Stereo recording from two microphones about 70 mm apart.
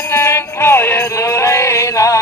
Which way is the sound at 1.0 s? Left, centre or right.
Left.